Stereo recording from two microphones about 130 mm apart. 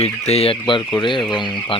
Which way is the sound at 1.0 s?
40° left (ahead or behind).